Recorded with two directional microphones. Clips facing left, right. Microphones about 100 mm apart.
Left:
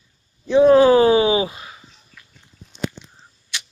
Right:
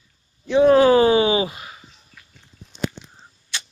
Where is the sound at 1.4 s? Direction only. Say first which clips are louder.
Even; 10° right (ahead or behind).